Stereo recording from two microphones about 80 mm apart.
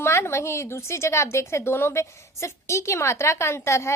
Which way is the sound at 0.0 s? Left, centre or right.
Left.